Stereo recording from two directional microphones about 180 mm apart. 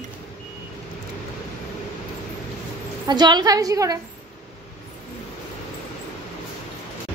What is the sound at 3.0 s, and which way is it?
Speech, 25° right (ahead or behind).